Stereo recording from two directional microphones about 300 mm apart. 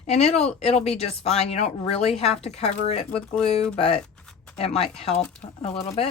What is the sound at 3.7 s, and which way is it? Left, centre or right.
Speech, centre.